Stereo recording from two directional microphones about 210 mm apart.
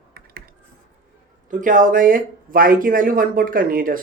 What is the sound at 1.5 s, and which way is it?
Speech, 40° right (ahead or behind).